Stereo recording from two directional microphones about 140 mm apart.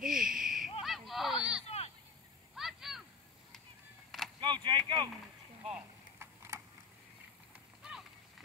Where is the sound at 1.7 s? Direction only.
50° left (ahead or behind).